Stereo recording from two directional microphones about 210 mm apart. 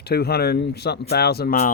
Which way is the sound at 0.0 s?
50° left (ahead or behind).